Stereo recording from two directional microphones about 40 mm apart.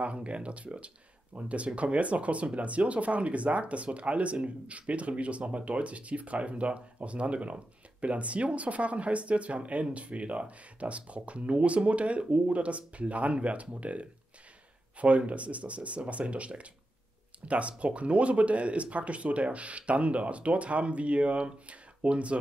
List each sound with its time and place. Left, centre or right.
0.0 s speech: right